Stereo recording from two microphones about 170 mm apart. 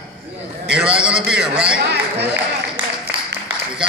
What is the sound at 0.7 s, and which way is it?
A man's voice, 5° right (ahead or behind).